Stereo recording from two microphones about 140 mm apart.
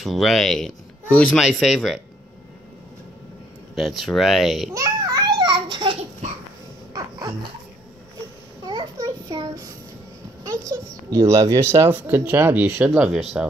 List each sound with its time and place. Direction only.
0.0 s speech: centre (ahead or behind)
3.7 s speech: centre (ahead or behind)
4.7 s a sound: 25° right (ahead or behind)
6.9 s music: 25° right (ahead or behind)
8.9 s a sound: 25° right (ahead or behind)
10.4 s speech: 25° right (ahead or behind); by 13.5 s centre (ahead or behind)